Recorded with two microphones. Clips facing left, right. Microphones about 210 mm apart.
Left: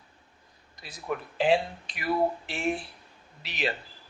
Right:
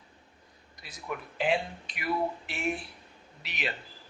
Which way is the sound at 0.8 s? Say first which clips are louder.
Left 5 dB; 30° left (ahead or behind).